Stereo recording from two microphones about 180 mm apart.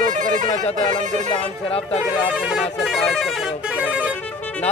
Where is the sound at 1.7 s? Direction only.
35° left (ahead or behind).